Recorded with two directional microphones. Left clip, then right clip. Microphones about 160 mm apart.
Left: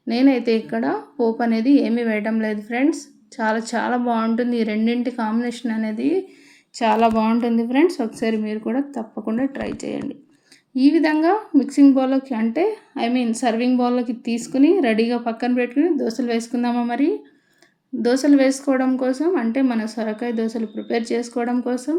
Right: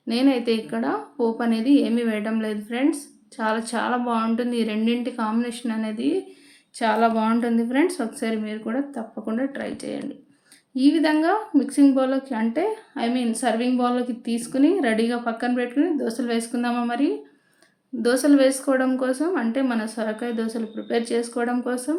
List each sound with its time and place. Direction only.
0.1 s a woman's voice: 20° left (ahead or behind)